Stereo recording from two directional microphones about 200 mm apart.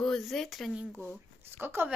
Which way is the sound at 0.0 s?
Centre (ahead or behind).